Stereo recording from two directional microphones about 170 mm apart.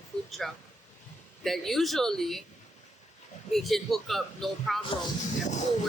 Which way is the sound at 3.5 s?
Centre (ahead or behind).